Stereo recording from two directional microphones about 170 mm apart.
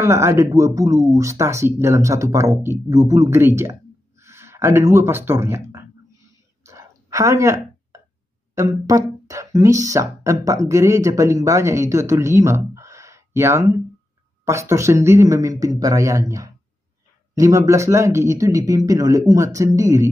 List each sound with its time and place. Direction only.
0.0 s speech: 15° right (ahead or behind)
6.6 s a sound: 20° right (ahead or behind)
8.5 s speech: 20° right (ahead or behind)